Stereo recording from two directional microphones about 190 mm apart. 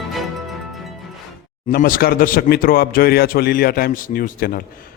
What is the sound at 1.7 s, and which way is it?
A man's voice, 50° left (ahead or behind).